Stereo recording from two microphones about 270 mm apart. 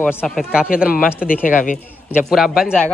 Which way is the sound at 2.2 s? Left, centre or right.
Centre.